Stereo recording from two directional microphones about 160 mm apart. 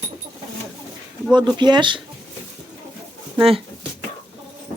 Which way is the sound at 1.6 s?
30° right (ahead or behind).